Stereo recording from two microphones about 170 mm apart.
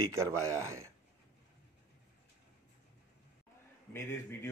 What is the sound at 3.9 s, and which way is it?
Speech, 15° left (ahead or behind).